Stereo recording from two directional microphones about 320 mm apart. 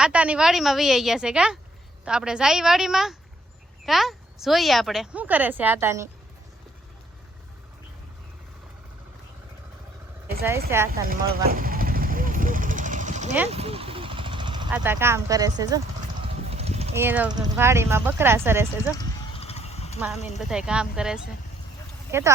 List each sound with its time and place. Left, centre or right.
0.0 s speech: centre
10.7 s speech: centre
11.5 s vehicle: right
14.7 s speech: centre
16.5 s clip-clop: centre
17.0 s speech: centre
18.9 s horse: centre
20.1 s speech: left
20.5 s speech: centre